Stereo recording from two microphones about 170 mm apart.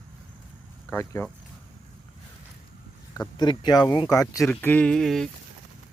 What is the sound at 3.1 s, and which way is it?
Speech, 20° left (ahead or behind).